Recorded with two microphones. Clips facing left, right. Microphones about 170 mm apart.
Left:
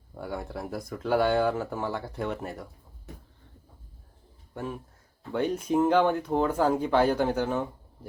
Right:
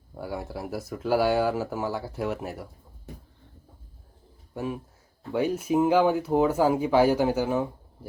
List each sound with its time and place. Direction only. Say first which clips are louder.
0.1 s speech: right 1 dB; 5° right (ahead or behind)
4.5 s speech: right 3 dB; 10° right (ahead or behind)